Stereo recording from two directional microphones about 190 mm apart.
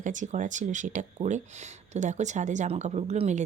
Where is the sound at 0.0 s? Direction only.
40° right (ahead or behind).